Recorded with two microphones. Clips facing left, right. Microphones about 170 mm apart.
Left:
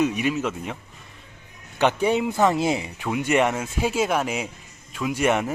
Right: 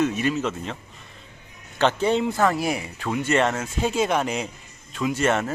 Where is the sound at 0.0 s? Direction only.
15° left (ahead or behind).